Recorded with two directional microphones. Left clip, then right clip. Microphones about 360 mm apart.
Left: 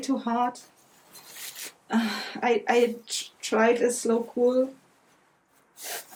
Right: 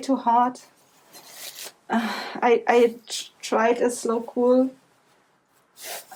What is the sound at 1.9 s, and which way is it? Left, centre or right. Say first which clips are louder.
A woman's voice: right 3 dB; centre.